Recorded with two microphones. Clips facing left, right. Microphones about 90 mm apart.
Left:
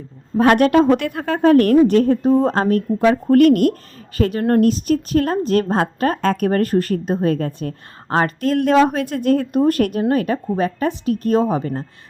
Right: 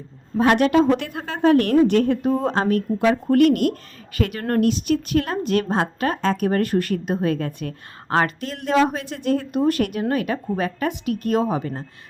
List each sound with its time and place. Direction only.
0.3 s a woman's voice: 50° left (ahead or behind)
8.4 s a woman's voice: 50° left (ahead or behind)